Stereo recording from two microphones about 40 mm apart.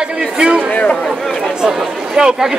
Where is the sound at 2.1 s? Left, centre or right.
Centre.